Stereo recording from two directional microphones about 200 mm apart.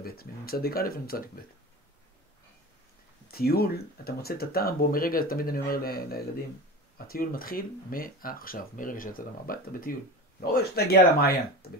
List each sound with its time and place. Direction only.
0.0 s speech: 50° left (ahead or behind)
3.3 s speech: 50° left (ahead or behind)